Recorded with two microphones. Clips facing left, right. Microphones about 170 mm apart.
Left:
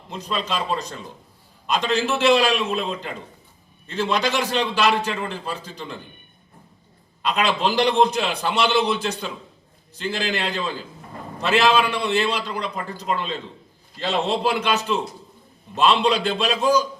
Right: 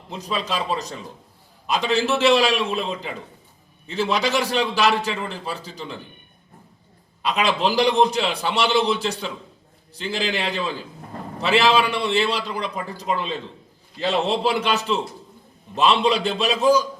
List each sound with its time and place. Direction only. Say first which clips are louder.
0.3 s a man's voice: even; 10° right (ahead or behind)
7.2 s a man's voice: even; 5° right (ahead or behind)
16.3 s a man's voice: right 2 dB; 5° right (ahead or behind)